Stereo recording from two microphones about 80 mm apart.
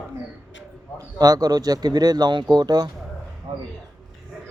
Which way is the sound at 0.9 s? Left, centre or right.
Right.